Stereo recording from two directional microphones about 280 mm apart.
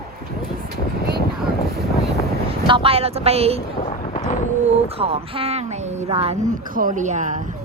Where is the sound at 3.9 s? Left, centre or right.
Left.